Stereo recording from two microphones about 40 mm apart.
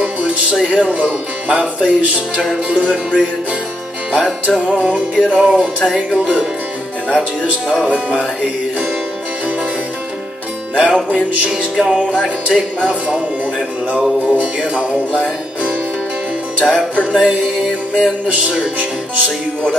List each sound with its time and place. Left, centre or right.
0.0 s music: right
0.6 s speech: right
4.5 s speech: right
6.1 s music: right
7.2 s speech: centre
7.9 s music: right
10.7 s music: right
11.7 s music: centre
12.4 s speech: right
14.4 s speech: right
16.6 s music: centre
17.0 s speech: right
17.6 s music: centre